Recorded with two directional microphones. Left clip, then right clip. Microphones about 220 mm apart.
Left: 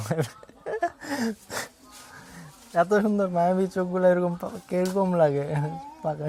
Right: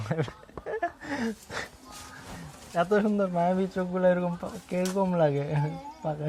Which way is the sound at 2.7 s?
50° left (ahead or behind).